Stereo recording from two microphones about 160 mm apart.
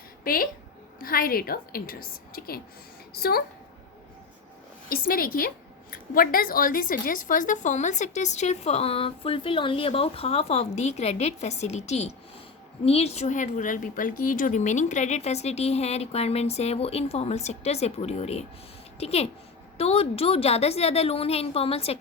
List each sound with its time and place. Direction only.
0.9 s a woman's voice: 65° left (ahead or behind)
4.9 s a woman's voice: 65° left (ahead or behind); by 21.9 s 40° left (ahead or behind)